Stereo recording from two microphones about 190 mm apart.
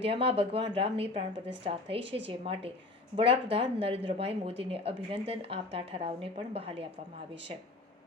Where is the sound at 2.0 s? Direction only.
70° right (ahead or behind).